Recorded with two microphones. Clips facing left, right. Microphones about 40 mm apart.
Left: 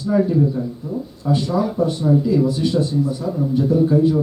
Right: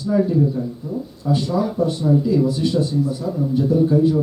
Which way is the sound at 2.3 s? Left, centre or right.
Centre.